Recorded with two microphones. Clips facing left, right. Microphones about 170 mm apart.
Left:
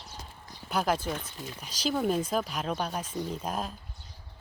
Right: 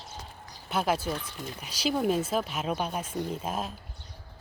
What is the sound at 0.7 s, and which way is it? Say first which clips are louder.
Speech: right 1 dB; 5° right (ahead or behind).